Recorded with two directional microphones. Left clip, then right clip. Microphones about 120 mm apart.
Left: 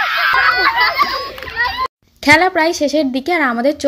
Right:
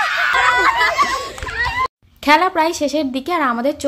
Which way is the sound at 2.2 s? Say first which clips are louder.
Left 3 dB; 25° left (ahead or behind).